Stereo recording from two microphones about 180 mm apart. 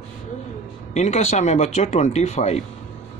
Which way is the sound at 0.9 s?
40° left (ahead or behind).